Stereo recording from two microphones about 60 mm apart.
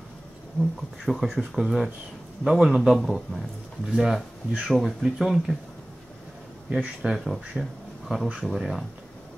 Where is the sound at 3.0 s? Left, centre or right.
Centre.